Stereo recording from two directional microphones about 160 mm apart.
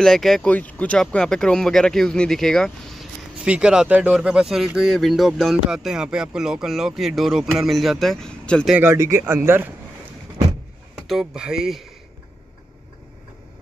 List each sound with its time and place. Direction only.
0.0 s speech: centre (ahead or behind)
8.7 s speech: 15° right (ahead or behind)
11.0 s speech: 5° right (ahead or behind)